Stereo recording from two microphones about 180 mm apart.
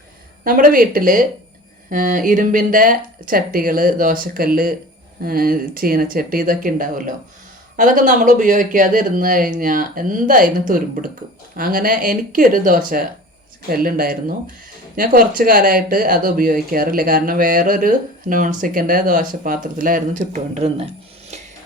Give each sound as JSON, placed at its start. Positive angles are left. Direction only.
{"t": 0.4, "sound": "speech", "side_deg": -50}